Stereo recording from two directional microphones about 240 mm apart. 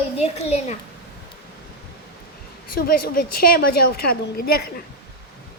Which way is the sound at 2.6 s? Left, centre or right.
Left.